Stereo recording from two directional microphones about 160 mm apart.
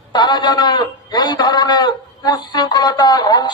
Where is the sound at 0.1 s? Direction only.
25° left (ahead or behind).